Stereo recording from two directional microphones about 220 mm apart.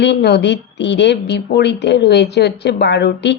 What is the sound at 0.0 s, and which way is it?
Speech, 50° left (ahead or behind).